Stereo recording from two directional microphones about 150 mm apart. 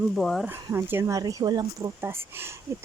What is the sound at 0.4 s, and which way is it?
Speech, 15° right (ahead or behind).